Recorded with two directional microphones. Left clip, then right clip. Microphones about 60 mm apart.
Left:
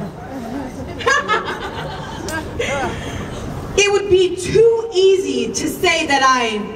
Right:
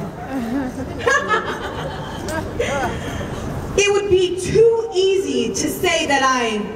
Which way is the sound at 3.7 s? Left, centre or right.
Centre.